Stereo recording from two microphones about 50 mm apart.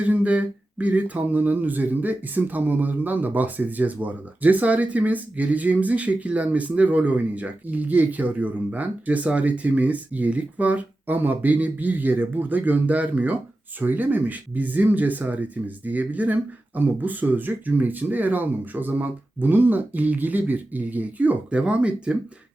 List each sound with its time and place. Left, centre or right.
0.0 s speech: right